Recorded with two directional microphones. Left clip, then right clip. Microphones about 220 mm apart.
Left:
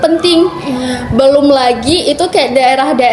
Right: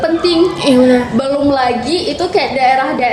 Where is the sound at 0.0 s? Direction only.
50° left (ahead or behind).